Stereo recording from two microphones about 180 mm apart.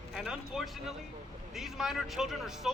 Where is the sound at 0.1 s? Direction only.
5° right (ahead or behind).